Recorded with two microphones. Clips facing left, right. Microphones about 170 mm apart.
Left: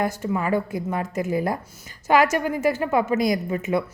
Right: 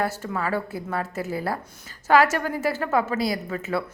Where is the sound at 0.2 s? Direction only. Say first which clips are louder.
Left 4 dB; 15° left (ahead or behind).